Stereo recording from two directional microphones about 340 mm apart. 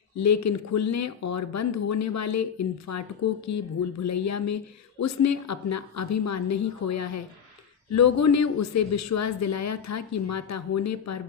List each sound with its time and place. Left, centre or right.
0.2 s a woman's voice: left